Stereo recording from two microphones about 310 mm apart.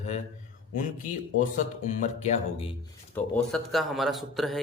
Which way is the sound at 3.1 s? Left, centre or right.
Centre.